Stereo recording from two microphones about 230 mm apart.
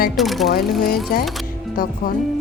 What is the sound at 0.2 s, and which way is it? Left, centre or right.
Speech, centre.